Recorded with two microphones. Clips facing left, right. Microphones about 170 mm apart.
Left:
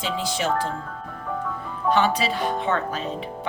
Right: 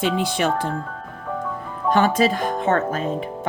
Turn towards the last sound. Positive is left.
turn(degrees=-50)  # may be behind; listen again after turning